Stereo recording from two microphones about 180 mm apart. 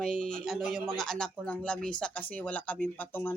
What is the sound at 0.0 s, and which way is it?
Speech, 5° left (ahead or behind).